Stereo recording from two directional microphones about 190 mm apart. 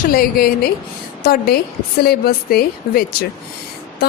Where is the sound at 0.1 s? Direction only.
50° left (ahead or behind).